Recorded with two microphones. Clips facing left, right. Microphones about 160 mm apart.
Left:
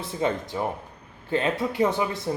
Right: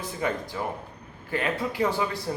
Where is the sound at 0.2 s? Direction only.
25° left (ahead or behind).